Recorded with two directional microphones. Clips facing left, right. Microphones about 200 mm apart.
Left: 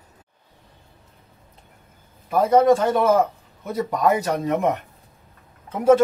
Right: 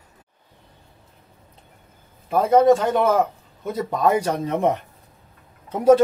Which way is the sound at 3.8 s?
30° right (ahead or behind).